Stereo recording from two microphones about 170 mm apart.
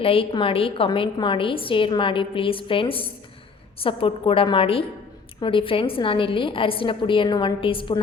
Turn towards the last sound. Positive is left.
turn(degrees=30)  # may be behind; listen again after turning